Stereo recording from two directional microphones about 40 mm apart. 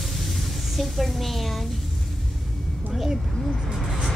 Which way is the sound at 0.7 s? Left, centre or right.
Centre.